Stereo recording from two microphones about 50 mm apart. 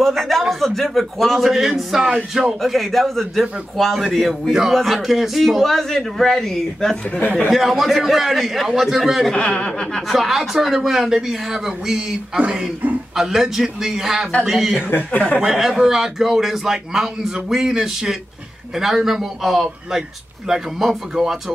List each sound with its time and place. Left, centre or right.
0.0 s a man's voice: centre
7.1 s speech: left
7.4 s a man's voice: centre
9.3 s speech: left
10.0 s a man's voice: centre
15.0 s speech: left
15.4 s a man's voice: centre